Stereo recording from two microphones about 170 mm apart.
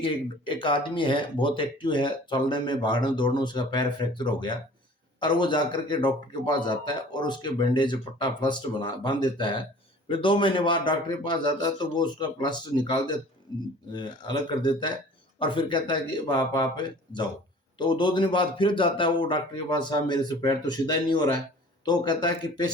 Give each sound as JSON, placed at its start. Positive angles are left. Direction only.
{"t": 0.0, "sound": "speech", "side_deg": 30}